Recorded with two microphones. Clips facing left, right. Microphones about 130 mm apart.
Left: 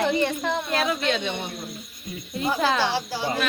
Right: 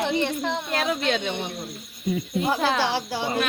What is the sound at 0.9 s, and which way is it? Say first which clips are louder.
Speech: even; 50° right (ahead or behind).